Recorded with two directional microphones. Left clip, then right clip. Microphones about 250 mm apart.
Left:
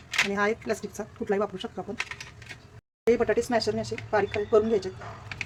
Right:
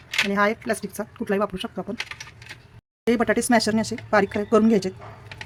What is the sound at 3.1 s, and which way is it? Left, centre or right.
Speech, right.